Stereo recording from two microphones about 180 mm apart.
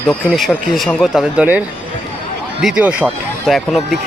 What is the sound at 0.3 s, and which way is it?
Speech, centre (ahead or behind).